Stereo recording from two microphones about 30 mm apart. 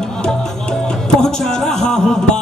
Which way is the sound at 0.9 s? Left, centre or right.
Left.